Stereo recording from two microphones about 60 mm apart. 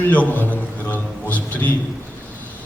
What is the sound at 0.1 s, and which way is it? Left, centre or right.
A man's voice, left.